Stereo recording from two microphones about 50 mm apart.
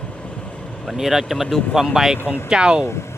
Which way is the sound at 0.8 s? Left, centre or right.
Centre.